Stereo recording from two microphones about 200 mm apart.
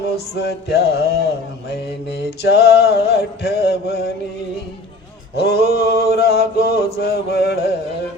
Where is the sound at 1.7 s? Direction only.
55° left (ahead or behind).